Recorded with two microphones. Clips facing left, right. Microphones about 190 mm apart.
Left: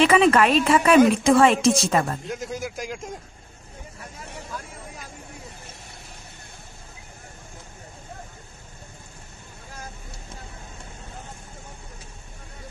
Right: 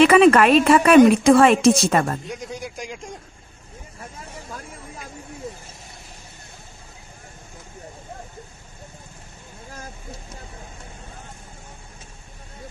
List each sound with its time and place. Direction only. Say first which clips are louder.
0.0 s a woman's voice: right 4 dB; 60° right (ahead or behind)
2.2 s a man's voice: left 2 dB; centre (ahead or behind)
4.4 s vehicle: even; 50° right (ahead or behind)